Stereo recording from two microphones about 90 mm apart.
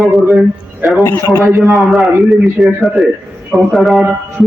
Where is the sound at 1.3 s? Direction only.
25° right (ahead or behind).